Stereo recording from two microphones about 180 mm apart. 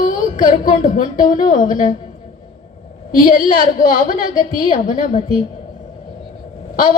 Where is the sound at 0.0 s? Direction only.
50° left (ahead or behind).